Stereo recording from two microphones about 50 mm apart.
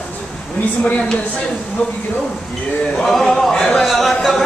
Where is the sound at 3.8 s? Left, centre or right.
Centre.